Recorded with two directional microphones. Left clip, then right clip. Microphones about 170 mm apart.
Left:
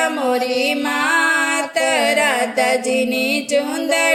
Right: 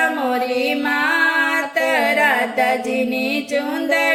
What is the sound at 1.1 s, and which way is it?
Music, 25° left (ahead or behind).